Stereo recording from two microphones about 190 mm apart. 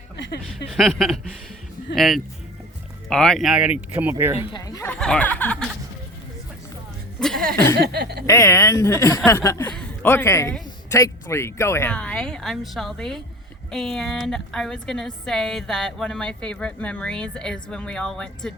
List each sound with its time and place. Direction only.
0.7 s a woman's voice: centre (ahead or behind)
4.5 s a man's voice: 20° left (ahead or behind)
4.9 s a woman's voice: 5° left (ahead or behind)
7.5 s a man's voice: 15° left (ahead or behind)
7.8 s speech: 55° right (ahead or behind)
8.3 s a man's voice: 15° left (ahead or behind)